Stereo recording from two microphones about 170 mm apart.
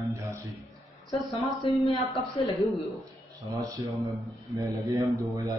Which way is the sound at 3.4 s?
20° right (ahead or behind).